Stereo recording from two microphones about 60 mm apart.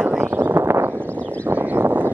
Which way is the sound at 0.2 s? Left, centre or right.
Right.